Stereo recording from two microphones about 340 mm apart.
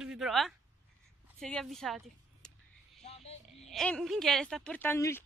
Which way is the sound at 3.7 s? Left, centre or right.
Centre.